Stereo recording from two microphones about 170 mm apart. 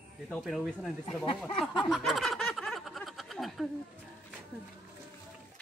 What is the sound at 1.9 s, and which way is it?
Snicker, centre (ahead or behind).